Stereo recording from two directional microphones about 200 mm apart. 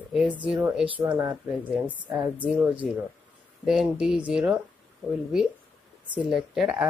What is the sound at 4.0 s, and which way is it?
Speech, centre (ahead or behind).